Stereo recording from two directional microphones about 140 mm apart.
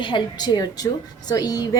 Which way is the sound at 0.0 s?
35° left (ahead or behind).